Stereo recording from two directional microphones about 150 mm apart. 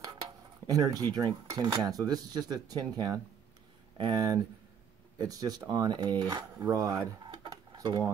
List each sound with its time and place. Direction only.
0.7 s speech: 25° right (ahead or behind)
7.2 s dishes: 25° right (ahead or behind)